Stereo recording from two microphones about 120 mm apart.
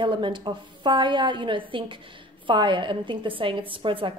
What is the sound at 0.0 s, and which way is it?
A woman's voice, 45° right (ahead or behind).